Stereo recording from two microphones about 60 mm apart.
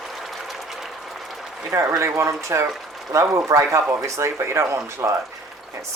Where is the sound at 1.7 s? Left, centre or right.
Right.